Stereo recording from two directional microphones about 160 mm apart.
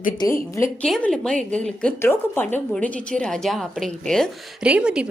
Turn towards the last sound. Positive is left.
turn(degrees=-5)  # may be behind; listen again after turning